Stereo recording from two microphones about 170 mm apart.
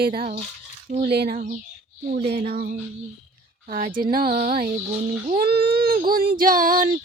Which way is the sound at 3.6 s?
55° right (ahead or behind).